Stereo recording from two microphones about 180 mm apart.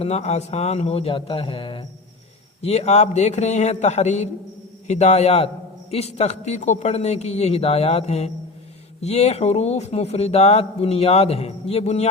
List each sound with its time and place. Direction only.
0.0 s speech: 35° left (ahead or behind)